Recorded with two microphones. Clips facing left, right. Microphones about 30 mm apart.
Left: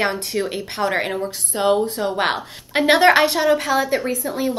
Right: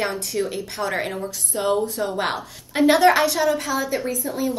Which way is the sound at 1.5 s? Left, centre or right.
Left.